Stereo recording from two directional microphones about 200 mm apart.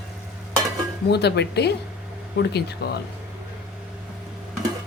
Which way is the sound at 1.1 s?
55° left (ahead or behind).